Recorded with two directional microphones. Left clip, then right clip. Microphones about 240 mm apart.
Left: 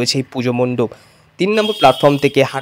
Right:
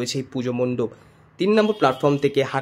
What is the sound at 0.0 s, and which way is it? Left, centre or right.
A man's voice, left.